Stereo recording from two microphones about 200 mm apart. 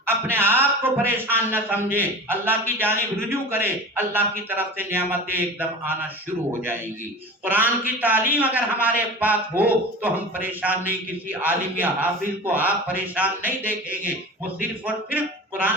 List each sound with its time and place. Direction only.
0.0 s a man's voice: 10° right (ahead or behind)